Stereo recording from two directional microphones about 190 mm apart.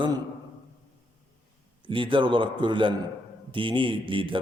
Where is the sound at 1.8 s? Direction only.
25° right (ahead or behind).